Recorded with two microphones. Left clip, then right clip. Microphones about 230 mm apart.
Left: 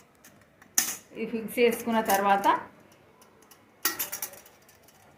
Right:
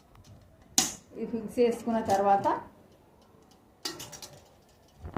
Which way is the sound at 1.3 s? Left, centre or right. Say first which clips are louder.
Left 2 dB; left.